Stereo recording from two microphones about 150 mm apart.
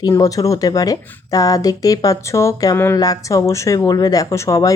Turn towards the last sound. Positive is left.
turn(degrees=20)  # may be behind; listen again after turning